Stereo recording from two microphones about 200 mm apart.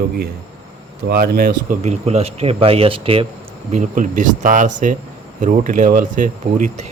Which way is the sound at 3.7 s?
40° right (ahead or behind).